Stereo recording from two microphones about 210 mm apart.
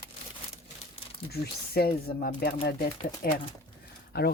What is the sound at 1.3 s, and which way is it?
Speech, 50° left (ahead or behind).